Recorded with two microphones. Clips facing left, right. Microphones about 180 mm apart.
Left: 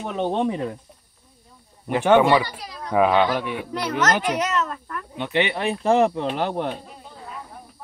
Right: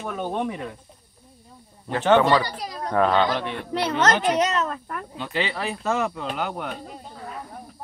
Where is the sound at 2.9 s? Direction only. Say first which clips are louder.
Left 2 dB; 10° left (ahead or behind).